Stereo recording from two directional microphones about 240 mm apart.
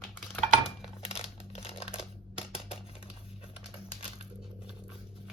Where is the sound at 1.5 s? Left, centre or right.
Left.